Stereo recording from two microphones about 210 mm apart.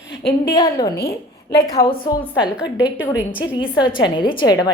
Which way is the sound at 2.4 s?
5° right (ahead or behind).